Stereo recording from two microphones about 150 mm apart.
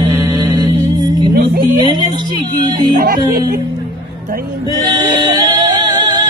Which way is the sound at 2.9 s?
70° right (ahead or behind).